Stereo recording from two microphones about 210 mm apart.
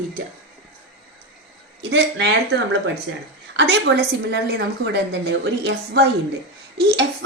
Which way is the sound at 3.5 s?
50° right (ahead or behind).